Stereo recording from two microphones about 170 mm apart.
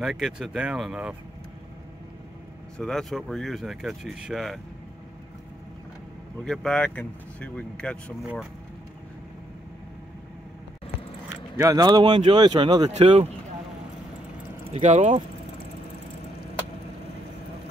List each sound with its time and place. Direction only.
0.0 s speech: centre (ahead or behind)
2.8 s speech: centre (ahead or behind)
6.4 s speech: 5° left (ahead or behind)
11.5 s speech: 20° right (ahead or behind)
12.9 s speech: 40° right (ahead or behind)
14.7 s speech: 40° right (ahead or behind)